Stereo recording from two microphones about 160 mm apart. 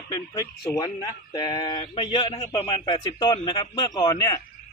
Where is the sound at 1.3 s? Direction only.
25° left (ahead or behind).